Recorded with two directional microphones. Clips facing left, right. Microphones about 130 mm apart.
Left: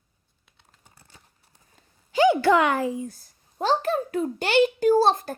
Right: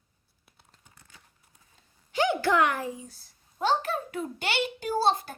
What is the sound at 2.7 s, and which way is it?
Speech, 90° left.